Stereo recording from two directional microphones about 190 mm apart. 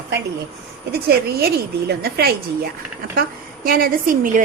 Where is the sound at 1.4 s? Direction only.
55° right (ahead or behind).